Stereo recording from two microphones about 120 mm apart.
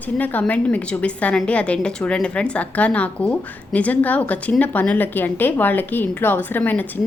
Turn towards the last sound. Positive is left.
turn(degrees=15)  # may be behind; listen again after turning